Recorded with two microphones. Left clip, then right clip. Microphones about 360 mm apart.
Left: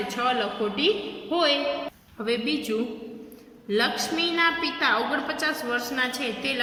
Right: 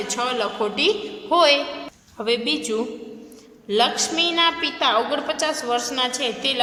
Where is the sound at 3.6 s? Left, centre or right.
Centre.